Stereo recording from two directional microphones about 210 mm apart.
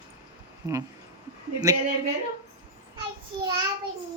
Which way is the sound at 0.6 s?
20° right (ahead or behind).